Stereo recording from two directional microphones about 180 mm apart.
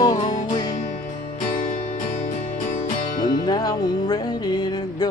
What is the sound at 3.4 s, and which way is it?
Music, 20° left (ahead or behind).